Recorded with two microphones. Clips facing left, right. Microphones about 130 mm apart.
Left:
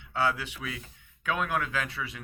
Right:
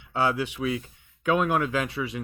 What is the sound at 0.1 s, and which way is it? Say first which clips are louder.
Speech: right 4 dB; 20° right (ahead or behind).